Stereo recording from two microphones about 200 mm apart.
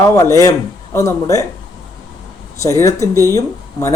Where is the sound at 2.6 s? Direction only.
15° left (ahead or behind).